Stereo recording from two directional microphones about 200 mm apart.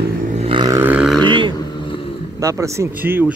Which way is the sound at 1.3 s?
25° right (ahead or behind).